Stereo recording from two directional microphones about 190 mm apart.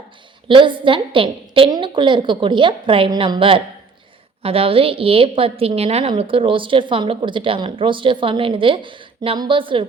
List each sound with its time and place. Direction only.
0.4 s a woman's voice: 25° right (ahead or behind)